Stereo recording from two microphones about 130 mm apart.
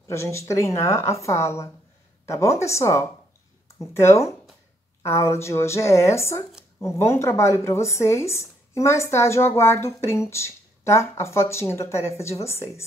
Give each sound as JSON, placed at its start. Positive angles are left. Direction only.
{"t": 0.1, "sound": "a woman's voice", "side_deg": 20}